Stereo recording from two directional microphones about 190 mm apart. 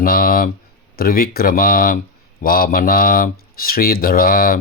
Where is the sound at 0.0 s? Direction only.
50° left (ahead or behind).